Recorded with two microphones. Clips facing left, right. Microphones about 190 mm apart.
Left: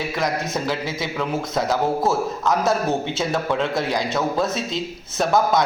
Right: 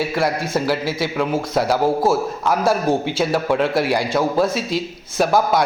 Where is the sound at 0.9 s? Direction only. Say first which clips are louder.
Right 5 dB; 25° left (ahead or behind).